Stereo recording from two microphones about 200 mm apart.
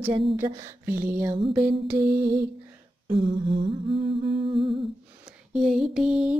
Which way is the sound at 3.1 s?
25° right (ahead or behind).